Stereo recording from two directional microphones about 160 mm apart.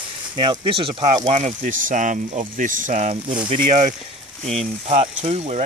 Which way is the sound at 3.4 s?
35° right (ahead or behind).